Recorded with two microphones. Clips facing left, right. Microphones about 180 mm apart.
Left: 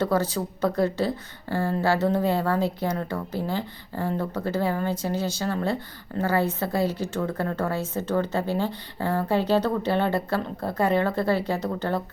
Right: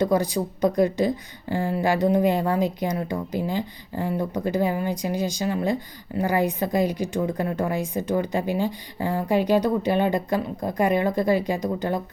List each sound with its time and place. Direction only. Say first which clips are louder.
0.0 s a woman's voice: right 2 dB; 15° right (ahead or behind)